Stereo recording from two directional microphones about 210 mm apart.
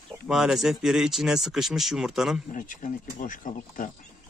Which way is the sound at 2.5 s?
40° left (ahead or behind).